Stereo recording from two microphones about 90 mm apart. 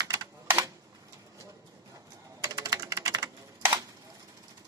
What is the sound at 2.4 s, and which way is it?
Typing, 40° right (ahead or behind).